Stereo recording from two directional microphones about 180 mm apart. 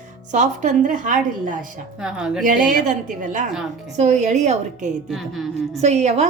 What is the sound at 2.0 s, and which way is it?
Speech, 5° right (ahead or behind).